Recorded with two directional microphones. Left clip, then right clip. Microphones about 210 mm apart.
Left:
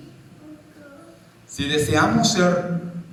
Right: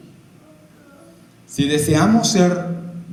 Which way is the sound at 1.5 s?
55° right (ahead or behind).